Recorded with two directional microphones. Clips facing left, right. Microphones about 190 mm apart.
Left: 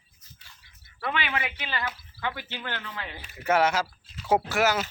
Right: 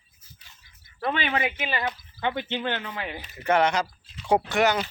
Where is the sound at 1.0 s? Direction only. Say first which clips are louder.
Right 4 dB; 35° right (ahead or behind).